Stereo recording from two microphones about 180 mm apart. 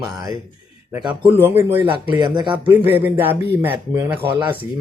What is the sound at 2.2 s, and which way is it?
Speech, 25° right (ahead or behind).